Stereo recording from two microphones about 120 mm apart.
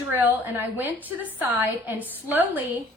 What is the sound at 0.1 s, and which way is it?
A woman's voice, 15° right (ahead or behind).